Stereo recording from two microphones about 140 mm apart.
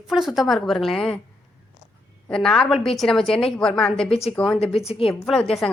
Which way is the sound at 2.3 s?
5° left (ahead or behind).